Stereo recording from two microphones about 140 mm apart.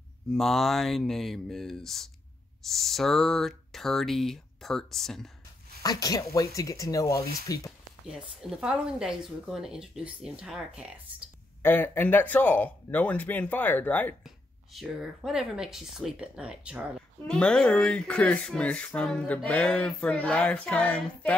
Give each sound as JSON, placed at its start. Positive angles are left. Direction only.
{"t": 0.3, "sound": "speech", "side_deg": 0}
{"t": 5.8, "sound": "speech", "side_deg": 25}
{"t": 8.4, "sound": "speech", "side_deg": -5}
{"t": 11.6, "sound": "speech", "side_deg": 15}
{"t": 14.2, "sound": "speech", "side_deg": 0}
{"t": 17.3, "sound": "speech", "side_deg": 5}